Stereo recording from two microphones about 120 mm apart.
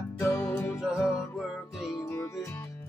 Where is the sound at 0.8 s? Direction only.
5° right (ahead or behind).